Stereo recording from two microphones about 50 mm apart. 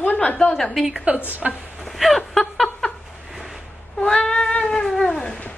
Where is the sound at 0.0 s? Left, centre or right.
Left.